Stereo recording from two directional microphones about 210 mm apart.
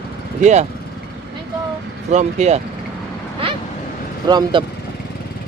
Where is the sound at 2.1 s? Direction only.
35° right (ahead or behind).